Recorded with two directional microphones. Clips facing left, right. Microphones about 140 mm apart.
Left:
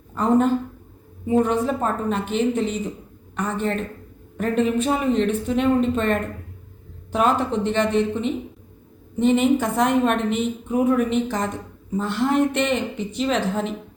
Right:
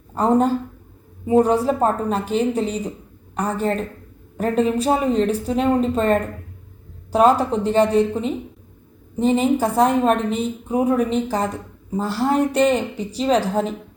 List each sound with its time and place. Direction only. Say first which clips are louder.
0.1 s a woman's voice: right 1 dB; 35° right (ahead or behind)